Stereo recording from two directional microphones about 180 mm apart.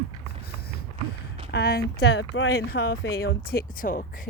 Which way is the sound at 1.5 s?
65° left (ahead or behind).